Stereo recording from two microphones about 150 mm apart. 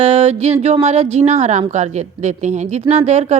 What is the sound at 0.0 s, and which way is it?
A woman's voice, 50° right (ahead or behind).